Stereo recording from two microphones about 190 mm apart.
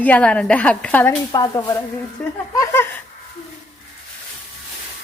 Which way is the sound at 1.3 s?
20° left (ahead or behind).